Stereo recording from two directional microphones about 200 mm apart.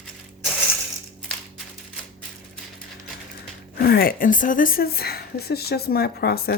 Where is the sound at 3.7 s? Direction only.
50° left (ahead or behind).